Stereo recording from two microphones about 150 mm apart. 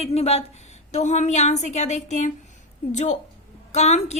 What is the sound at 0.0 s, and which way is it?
A woman's voice, 45° left (ahead or behind).